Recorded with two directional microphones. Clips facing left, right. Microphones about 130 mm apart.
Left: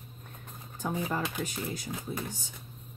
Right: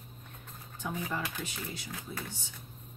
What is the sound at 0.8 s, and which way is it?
Speech, 45° left (ahead or behind).